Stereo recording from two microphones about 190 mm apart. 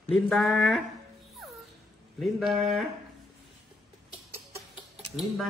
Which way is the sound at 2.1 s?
Centre (ahead or behind).